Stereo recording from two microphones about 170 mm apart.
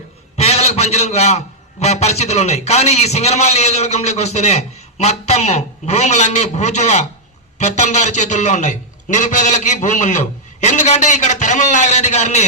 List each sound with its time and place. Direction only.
0.3 s a man's voice: 40° left (ahead or behind)